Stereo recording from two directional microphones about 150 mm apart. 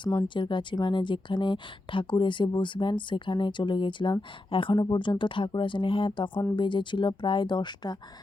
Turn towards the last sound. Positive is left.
turn(degrees=30)  # may be behind; listen again after turning